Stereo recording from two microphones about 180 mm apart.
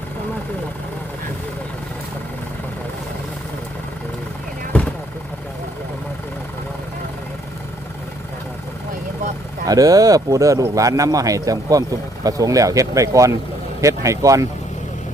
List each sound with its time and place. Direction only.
9.6 s speech: 20° right (ahead or behind)